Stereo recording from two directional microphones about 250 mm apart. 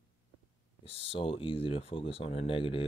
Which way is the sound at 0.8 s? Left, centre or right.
Left.